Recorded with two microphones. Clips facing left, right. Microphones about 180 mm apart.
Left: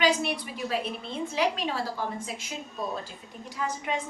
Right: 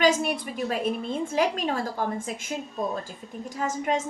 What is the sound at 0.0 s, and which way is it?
A woman's voice, 45° right (ahead or behind).